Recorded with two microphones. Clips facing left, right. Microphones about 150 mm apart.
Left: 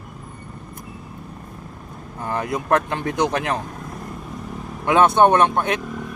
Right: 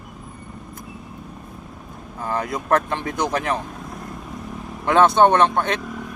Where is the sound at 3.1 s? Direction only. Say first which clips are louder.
Left 2 dB; 25° left (ahead or behind).